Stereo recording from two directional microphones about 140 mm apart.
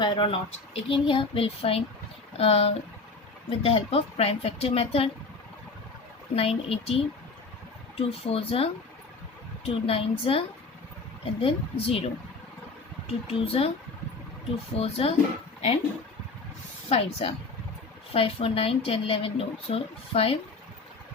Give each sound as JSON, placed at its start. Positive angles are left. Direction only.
{"t": 0.0, "sound": "a woman's voice", "side_deg": 35}
{"t": 6.3, "sound": "a woman's voice", "side_deg": 45}
{"t": 13.1, "sound": "a woman's voice", "side_deg": 45}
{"t": 14.8, "sound": "a woman's voice", "side_deg": 45}
{"t": 16.9, "sound": "a woman's voice", "side_deg": 45}